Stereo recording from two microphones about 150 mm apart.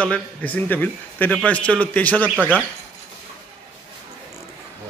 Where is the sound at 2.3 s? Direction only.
10° right (ahead or behind).